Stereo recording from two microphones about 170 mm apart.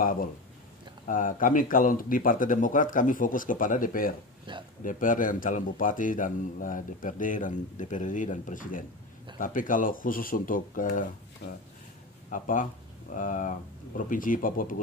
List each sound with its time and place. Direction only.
0.0 s a sound: 55° left (ahead or behind)
1.0 s speech: 50° left (ahead or behind)
4.5 s speech: 30° right (ahead or behind)
4.8 s speech: 50° left (ahead or behind)
11.4 s speech: 85° left
12.3 s speech: 50° left (ahead or behind)